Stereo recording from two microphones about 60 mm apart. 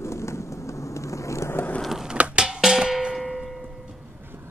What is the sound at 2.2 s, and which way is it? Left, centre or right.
Music, centre.